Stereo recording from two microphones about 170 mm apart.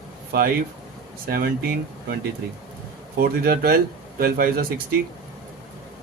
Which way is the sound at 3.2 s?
60° right (ahead or behind).